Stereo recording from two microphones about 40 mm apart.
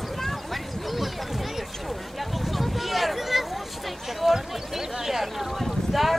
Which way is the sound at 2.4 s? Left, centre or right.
Centre.